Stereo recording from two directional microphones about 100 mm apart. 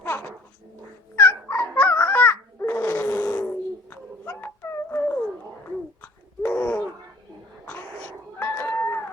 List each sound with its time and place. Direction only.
0.0 s dog: 20° left (ahead or behind)
1.1 s babbling: 15° left (ahead or behind)
3.8 s a sound: 20° left (ahead or behind)
7.6 s dog: 15° left (ahead or behind)
8.4 s chicken: 20° left (ahead or behind)